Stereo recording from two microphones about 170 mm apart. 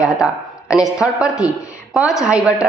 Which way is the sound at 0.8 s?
5° right (ahead or behind).